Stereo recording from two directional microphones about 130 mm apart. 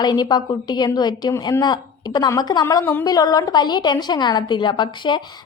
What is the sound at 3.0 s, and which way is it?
Speech, 30° left (ahead or behind).